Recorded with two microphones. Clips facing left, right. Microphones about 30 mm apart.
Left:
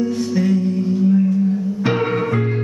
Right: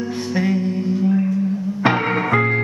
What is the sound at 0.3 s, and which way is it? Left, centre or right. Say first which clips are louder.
Music: even; right.